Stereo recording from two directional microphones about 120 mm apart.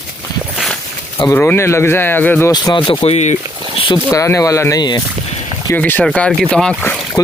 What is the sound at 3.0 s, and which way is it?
Speech, 70° left (ahead or behind).